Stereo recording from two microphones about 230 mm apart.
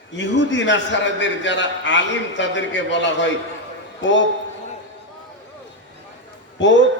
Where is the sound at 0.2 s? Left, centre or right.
Left.